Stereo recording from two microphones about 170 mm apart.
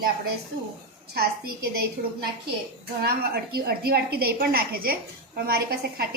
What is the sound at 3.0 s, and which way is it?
A woman's voice, 65° right (ahead or behind).